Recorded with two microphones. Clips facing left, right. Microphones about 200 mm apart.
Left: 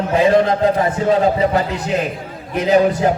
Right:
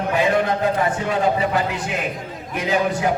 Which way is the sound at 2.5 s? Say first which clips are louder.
Left 7 dB; 35° left (ahead or behind).